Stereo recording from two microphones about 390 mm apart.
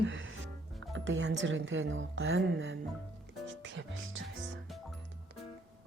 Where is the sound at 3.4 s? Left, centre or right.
Right.